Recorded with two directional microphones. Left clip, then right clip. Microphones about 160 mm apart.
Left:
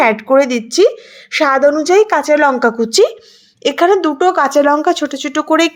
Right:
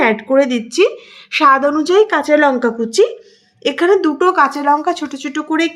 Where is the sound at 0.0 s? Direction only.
30° left (ahead or behind).